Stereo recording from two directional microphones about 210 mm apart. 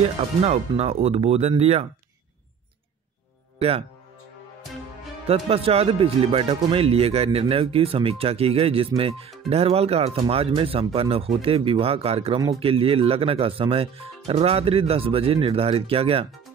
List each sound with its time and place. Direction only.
0.0 s speech: 30° right (ahead or behind)
5.2 s speech: 30° right (ahead or behind)